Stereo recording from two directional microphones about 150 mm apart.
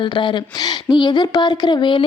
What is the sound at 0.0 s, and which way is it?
Speech, 30° left (ahead or behind).